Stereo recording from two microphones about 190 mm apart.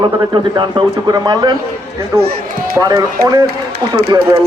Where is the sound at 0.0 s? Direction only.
25° right (ahead or behind).